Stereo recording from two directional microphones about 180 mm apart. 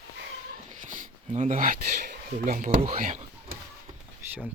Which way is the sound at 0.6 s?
45° right (ahead or behind).